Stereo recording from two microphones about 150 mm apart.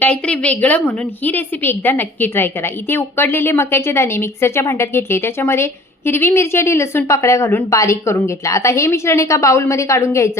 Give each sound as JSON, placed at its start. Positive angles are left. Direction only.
{"t": 0.0, "sound": "a woman's voice", "side_deg": 10}